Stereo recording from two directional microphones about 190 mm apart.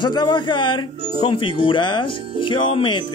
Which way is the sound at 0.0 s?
20° left (ahead or behind).